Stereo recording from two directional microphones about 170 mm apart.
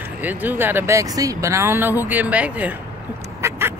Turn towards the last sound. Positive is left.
turn(degrees=-15)  # may be behind; listen again after turning